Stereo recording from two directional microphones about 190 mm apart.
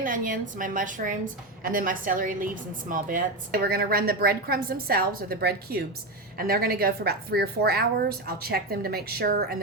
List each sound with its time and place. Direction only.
0.0 s a woman's voice: 45° right (ahead or behind)